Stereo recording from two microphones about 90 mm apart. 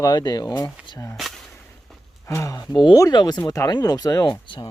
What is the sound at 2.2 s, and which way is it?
Speech, 30° left (ahead or behind).